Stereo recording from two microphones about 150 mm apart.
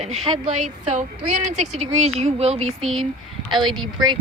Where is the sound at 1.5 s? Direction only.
50° right (ahead or behind).